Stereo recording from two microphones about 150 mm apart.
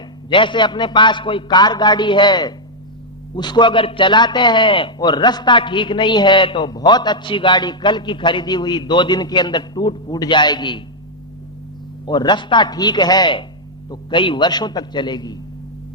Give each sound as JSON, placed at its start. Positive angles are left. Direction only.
{"t": 0.3, "sound": "a man's voice", "side_deg": 30}
{"t": 12.0, "sound": "a man's voice", "side_deg": 30}